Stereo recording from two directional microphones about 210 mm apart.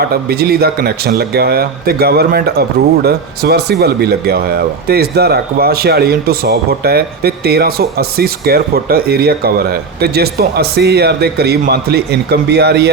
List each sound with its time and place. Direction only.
0.0 s speech: 45° right (ahead or behind)